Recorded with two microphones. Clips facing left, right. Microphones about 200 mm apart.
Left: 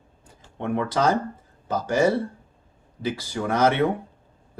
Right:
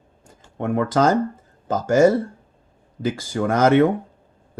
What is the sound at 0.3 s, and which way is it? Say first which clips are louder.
Speech: right 3 dB; 45° right (ahead or behind).